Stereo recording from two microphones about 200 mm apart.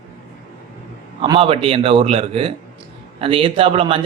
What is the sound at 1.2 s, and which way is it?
A man's voice, 25° right (ahead or behind).